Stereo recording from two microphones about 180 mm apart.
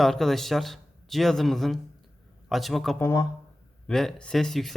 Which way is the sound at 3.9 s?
Centre (ahead or behind).